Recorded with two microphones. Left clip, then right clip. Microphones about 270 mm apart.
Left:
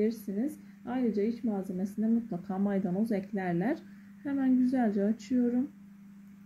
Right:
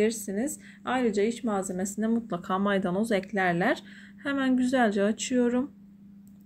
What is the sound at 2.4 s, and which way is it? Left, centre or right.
Speech, centre.